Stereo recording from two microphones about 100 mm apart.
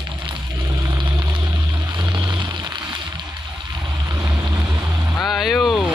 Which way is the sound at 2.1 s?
50° right (ahead or behind).